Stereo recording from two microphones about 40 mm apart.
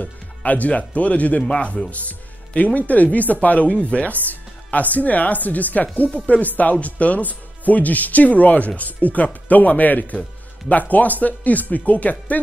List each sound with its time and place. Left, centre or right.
0.5 s speech: left